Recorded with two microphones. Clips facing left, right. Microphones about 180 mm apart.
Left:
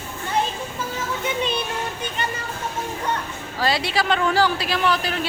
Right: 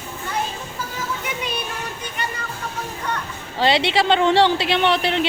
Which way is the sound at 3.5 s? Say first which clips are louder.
Right 4 dB; 25° right (ahead or behind).